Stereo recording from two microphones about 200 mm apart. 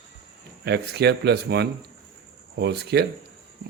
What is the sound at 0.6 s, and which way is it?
A man's voice, 55° right (ahead or behind).